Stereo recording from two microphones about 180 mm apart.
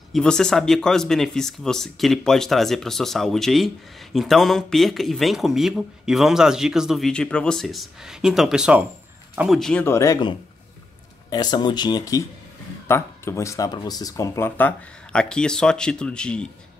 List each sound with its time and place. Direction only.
0.1 s speech: 5° left (ahead or behind)